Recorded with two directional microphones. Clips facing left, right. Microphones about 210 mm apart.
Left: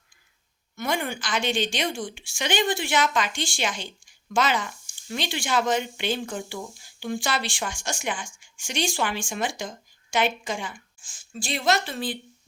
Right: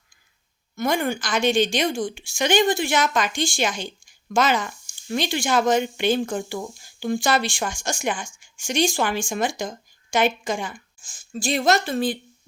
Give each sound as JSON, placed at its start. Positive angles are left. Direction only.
{"t": 0.8, "sound": "speech", "side_deg": -40}